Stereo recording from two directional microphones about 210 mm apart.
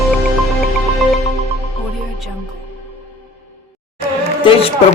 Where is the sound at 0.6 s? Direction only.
Centre (ahead or behind).